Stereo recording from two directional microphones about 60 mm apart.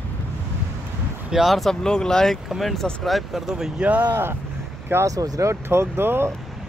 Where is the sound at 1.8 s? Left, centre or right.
Centre.